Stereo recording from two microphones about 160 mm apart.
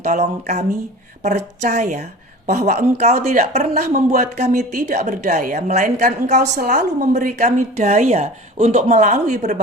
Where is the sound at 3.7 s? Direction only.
60° right (ahead or behind).